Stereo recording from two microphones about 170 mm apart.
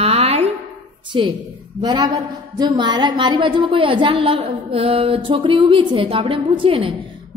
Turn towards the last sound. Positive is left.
turn(degrees=-30)  # may be behind; listen again after turning